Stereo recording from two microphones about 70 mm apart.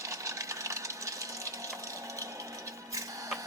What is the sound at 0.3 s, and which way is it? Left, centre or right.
Sewing machine, right.